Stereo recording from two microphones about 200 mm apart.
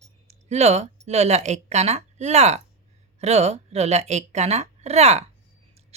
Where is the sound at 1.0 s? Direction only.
35° right (ahead or behind).